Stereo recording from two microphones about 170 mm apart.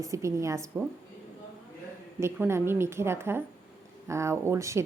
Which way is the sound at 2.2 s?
15° right (ahead or behind).